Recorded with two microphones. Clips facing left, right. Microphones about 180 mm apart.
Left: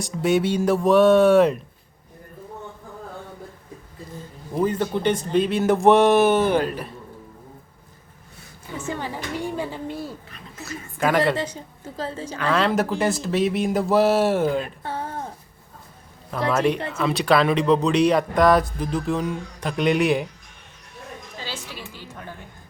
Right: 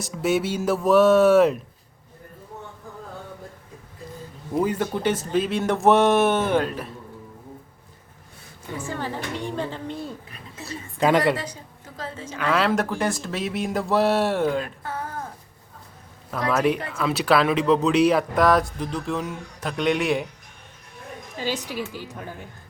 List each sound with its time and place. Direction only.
0.0 s speech: 5° right (ahead or behind)
4.5 s speech: 10° right (ahead or behind)
8.9 s speech: 15° left (ahead or behind)
10.6 s speech: 25° right (ahead or behind)
11.3 s a woman's voice: 25° left (ahead or behind)
12.4 s speech: 10° right (ahead or behind)
14.8 s a sound: 30° left (ahead or behind)
16.5 s speech: 5° right (ahead or behind)
21.3 s music: 15° right (ahead or behind)